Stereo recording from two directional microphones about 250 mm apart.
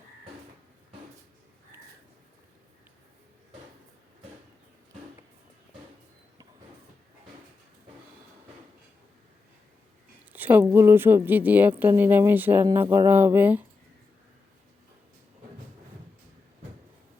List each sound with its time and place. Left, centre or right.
10.3 s a woman's voice: centre